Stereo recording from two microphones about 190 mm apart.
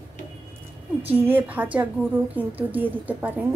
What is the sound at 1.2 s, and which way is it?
A woman's voice, 10° right (ahead or behind).